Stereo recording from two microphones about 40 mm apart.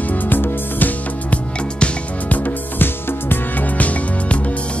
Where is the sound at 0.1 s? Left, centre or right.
Left.